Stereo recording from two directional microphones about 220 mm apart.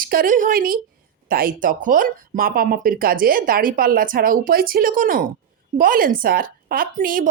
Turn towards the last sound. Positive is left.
turn(degrees=-40)  # may be behind; listen again after turning